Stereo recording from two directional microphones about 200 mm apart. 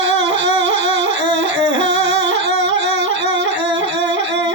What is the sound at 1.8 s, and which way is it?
Singing, 65° right (ahead or behind).